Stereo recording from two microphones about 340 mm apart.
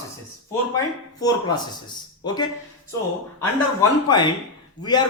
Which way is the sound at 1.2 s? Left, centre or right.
Centre.